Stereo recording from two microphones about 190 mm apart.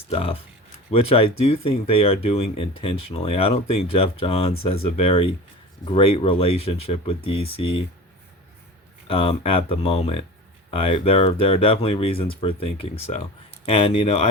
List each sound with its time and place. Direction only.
0.1 s speech: 30° left (ahead or behind)
9.0 s speech: 30° left (ahead or behind)